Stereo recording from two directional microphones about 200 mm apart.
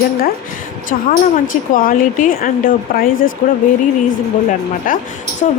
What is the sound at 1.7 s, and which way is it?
A woman's voice, 45° left (ahead or behind).